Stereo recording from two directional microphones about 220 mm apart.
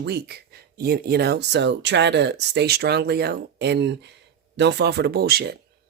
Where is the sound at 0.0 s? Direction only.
45° right (ahead or behind).